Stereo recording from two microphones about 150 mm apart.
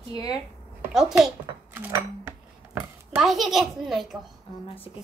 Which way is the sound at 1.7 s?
15° right (ahead or behind).